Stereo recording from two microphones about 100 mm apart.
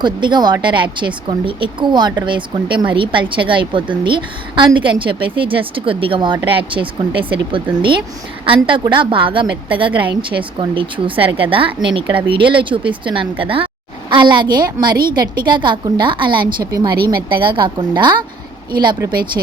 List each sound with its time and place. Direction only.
0.0 s speech: 50° right (ahead or behind)
14.1 s a woman's voice: 50° right (ahead or behind)